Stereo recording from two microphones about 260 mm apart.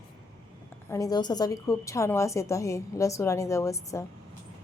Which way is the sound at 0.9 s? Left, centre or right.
Centre.